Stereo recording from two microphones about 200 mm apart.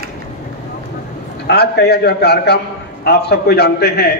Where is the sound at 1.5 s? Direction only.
55° left (ahead or behind).